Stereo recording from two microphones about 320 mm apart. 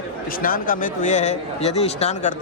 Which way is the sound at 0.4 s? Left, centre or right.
Left.